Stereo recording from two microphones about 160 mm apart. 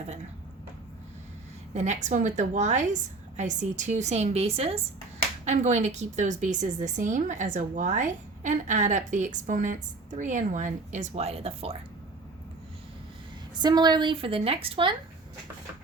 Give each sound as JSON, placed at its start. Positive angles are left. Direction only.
{"t": 1.7, "sound": "a woman's voice", "side_deg": -45}
{"t": 13.6, "sound": "a woman's voice", "side_deg": -25}